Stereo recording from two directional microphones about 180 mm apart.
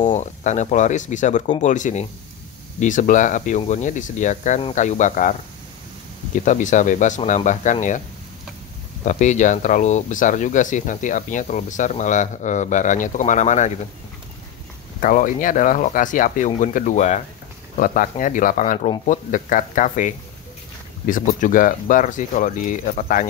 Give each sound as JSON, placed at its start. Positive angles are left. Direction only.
{"t": 0.1, "sound": "speech", "side_deg": 40}
{"t": 6.4, "sound": "speech", "side_deg": 45}
{"t": 9.0, "sound": "speech", "side_deg": 40}
{"t": 15.0, "sound": "speech", "side_deg": 45}